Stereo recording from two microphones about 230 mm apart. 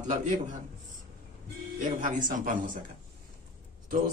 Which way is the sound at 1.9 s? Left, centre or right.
Right.